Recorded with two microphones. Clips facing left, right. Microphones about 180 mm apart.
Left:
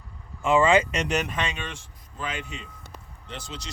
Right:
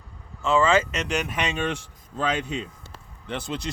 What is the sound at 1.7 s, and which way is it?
Speech, 90° right.